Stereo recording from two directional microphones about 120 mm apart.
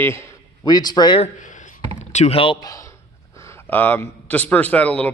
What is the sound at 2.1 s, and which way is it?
Speech, 75° left (ahead or behind).